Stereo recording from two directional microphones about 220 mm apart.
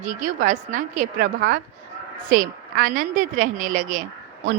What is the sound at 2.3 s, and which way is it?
A woman's voice, 40° right (ahead or behind).